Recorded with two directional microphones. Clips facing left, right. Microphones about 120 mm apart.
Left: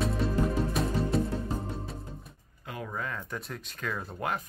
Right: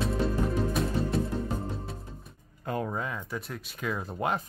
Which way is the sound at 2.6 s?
40° right (ahead or behind).